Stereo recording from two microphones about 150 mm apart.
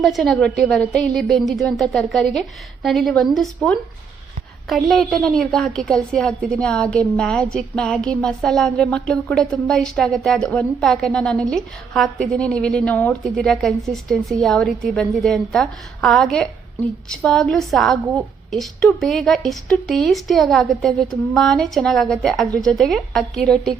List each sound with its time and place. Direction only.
0.0 s a woman's voice: centre (ahead or behind)